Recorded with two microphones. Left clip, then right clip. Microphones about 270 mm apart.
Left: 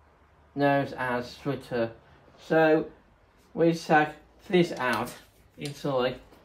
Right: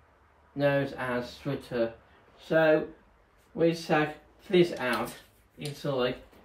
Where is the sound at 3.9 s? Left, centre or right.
Centre.